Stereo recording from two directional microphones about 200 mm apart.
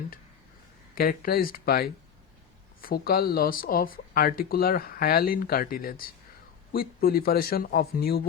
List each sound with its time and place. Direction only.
0.9 s speech: 45° left (ahead or behind)